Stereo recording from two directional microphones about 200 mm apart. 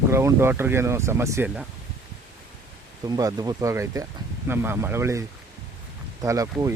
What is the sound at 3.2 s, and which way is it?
Speech, 20° right (ahead or behind).